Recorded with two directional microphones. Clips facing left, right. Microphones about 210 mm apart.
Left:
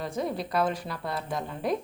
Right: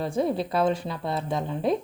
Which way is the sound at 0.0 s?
30° right (ahead or behind).